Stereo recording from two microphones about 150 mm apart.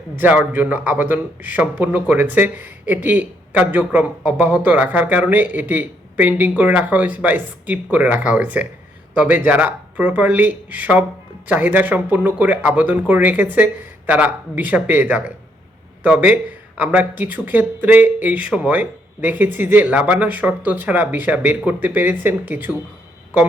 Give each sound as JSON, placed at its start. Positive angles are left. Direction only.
{"t": 0.2, "sound": "speech", "side_deg": -10}